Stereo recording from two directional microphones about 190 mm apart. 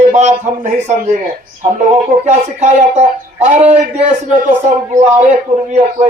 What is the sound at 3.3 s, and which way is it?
Speech, 10° right (ahead or behind).